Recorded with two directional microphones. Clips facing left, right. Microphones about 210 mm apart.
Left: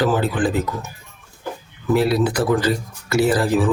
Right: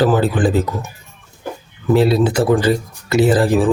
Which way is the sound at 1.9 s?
25° right (ahead or behind).